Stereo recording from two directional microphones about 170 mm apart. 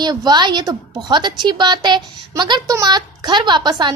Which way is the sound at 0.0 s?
25° right (ahead or behind).